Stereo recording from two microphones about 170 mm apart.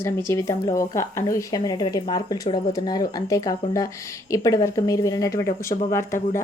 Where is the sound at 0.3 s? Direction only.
20° left (ahead or behind).